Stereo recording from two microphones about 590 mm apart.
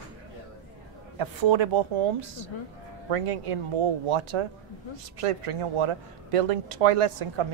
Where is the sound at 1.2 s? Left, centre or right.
Right.